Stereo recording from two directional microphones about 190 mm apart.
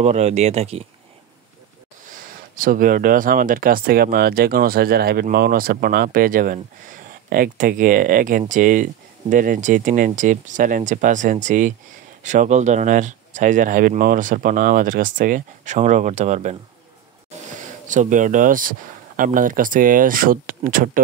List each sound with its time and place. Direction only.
0.0 s speech: 35° right (ahead or behind)
2.1 s speech: 45° right (ahead or behind)
17.6 s speech: 40° right (ahead or behind)